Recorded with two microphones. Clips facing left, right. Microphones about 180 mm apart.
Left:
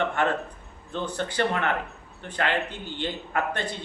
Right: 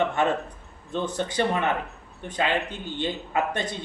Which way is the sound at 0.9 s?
15° right (ahead or behind).